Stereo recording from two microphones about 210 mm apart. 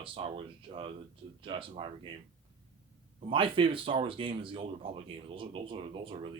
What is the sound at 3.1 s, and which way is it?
Speech, 25° right (ahead or behind).